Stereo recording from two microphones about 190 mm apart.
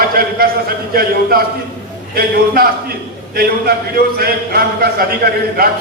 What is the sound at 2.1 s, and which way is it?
A man's voice, 50° right (ahead or behind).